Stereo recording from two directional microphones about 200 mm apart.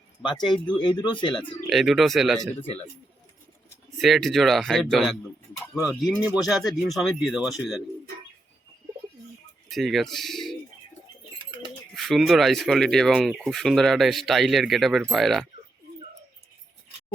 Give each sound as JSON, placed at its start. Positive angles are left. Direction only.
{"t": 0.3, "sound": "speech", "side_deg": 25}
{"t": 1.6, "sound": "speech", "side_deg": 0}
{"t": 3.9, "sound": "speech", "side_deg": 0}
{"t": 9.6, "sound": "speech", "side_deg": 0}
{"t": 11.9, "sound": "speech", "side_deg": 0}